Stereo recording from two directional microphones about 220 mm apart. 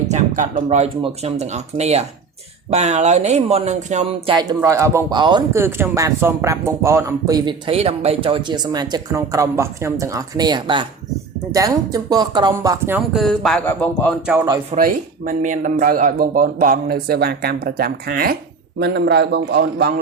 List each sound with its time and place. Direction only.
0.1 s speech: 35° right (ahead or behind)
4.6 s speech: 15° right (ahead or behind)
13.1 s speech: centre (ahead or behind)
14.4 s speech: 20° right (ahead or behind)
14.8 s a man's voice: 40° right (ahead or behind)